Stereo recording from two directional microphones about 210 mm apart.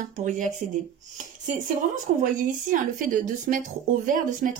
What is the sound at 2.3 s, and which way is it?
Speech, 40° right (ahead or behind).